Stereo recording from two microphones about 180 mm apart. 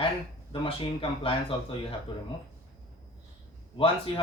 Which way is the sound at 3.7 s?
30° left (ahead or behind).